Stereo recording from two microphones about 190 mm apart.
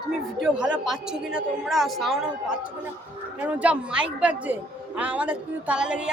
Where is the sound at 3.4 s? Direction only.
5° right (ahead or behind).